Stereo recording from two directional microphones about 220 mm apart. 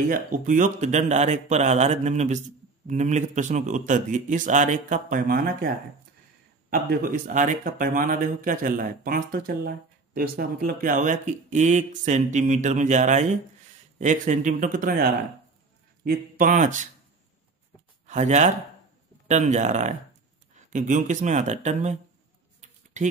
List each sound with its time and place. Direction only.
0.1 s speech: 35° right (ahead or behind)
6.7 s speech: 40° right (ahead or behind)
18.0 s speech: 30° right (ahead or behind)
22.6 s a sound: 30° right (ahead or behind)